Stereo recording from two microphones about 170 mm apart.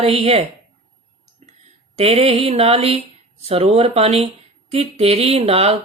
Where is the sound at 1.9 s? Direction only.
35° right (ahead or behind).